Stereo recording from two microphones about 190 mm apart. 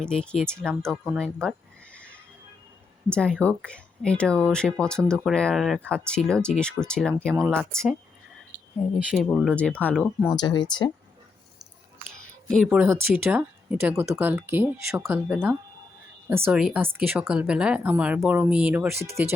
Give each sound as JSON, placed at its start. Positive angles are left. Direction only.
{"t": 0.0, "sound": "speech", "side_deg": 5}
{"t": 7.3, "sound": "speech", "side_deg": -10}
{"t": 7.6, "sound": "speech", "side_deg": 5}
{"t": 9.0, "sound": "speech", "side_deg": 0}
{"t": 10.3, "sound": "speech", "side_deg": 25}
{"t": 12.2, "sound": "a sound", "side_deg": 5}
{"t": 12.6, "sound": "speech", "side_deg": -10}